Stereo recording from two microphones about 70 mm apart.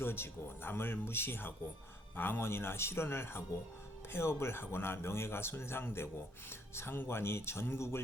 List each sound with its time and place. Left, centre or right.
0.0 s a man's voice: left